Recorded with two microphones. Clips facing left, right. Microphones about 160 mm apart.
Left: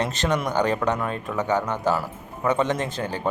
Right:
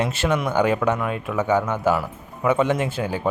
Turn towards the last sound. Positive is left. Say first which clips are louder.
# right 3 dB
turn(degrees=-10)  # may be behind; listen again after turning